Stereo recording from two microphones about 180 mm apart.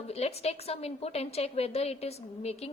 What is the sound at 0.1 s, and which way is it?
A woman's voice, 35° left (ahead or behind).